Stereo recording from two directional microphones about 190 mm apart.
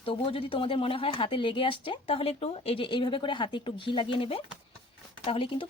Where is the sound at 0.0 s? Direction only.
30° left (ahead or behind).